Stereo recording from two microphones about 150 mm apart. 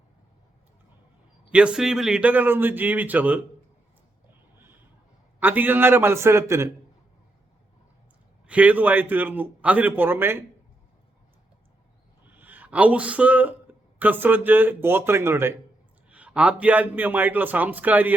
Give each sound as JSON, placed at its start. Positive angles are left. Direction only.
{"t": 1.5, "sound": "a man's voice", "side_deg": -5}
{"t": 5.4, "sound": "a man's voice", "side_deg": -10}
{"t": 8.4, "sound": "a man's voice", "side_deg": -10}
{"t": 12.2, "sound": "a sound", "side_deg": -10}
{"t": 14.0, "sound": "a man's voice", "side_deg": -10}